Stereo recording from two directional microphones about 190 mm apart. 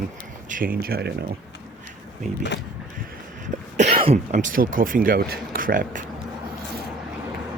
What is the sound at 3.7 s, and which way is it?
Speech, 30° right (ahead or behind).